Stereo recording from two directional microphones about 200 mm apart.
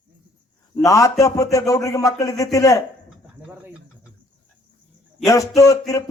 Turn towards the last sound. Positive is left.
turn(degrees=15)  # may be behind; listen again after turning